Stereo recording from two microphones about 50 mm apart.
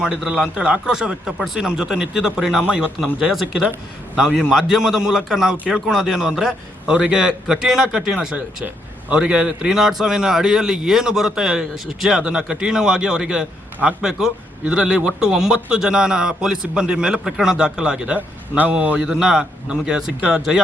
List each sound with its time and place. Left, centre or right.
0.3 s a man's voice: centre
7.9 s a man's voice: centre
19.0 s a man's voice: centre